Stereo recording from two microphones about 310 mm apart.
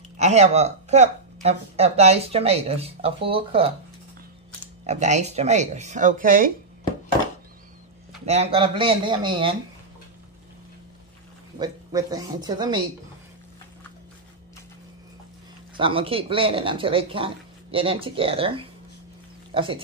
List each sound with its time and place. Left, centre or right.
0.2 s speech: right
4.8 s speech: right
8.3 s speech: centre
11.5 s speech: centre
15.8 s speech: centre